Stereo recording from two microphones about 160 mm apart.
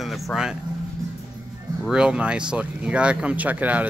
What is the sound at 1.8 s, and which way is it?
Speech, 5° right (ahead or behind).